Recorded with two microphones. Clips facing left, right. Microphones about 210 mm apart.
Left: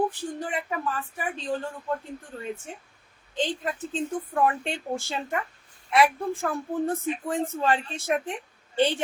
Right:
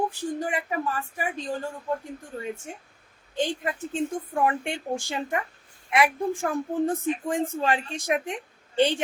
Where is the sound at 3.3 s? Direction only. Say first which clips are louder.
Right 1 dB; 10° right (ahead or behind).